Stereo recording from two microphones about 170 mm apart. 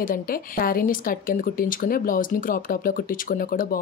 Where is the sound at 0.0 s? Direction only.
55° left (ahead or behind).